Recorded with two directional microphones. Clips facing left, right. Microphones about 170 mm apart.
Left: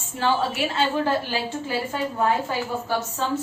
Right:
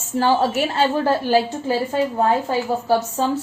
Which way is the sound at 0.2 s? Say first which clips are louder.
Right 5 dB; 40° right (ahead or behind).